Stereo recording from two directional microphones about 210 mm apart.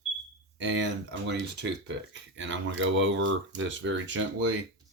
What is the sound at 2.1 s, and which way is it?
Speech, 60° right (ahead or behind).